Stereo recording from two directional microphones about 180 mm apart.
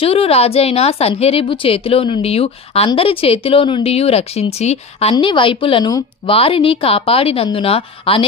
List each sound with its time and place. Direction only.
0.0 s a woman's voice: 35° left (ahead or behind)